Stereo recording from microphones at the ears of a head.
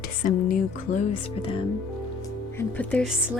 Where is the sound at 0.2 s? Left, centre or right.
Left.